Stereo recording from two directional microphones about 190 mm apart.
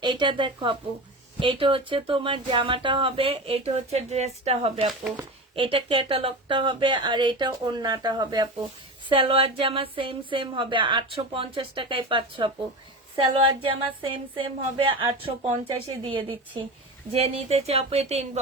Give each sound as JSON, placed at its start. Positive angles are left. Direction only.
{"t": 0.0, "sound": "speech", "side_deg": -25}